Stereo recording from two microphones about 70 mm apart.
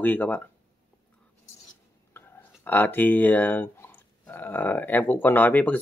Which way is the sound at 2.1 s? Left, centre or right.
Left.